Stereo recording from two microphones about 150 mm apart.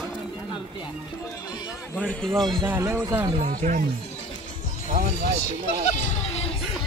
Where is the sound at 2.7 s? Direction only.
15° right (ahead or behind).